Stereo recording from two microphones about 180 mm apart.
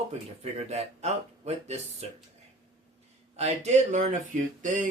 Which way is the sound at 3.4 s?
35° right (ahead or behind).